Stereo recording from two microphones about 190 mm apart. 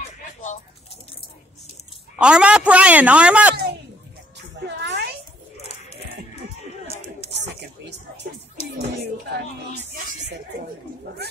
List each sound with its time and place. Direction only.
2.1 s a man's voice: 5° right (ahead or behind)
4.6 s music: 65° right (ahead or behind)
7.3 s a sound: 65° right (ahead or behind)
9.0 s speech: 60° right (ahead or behind)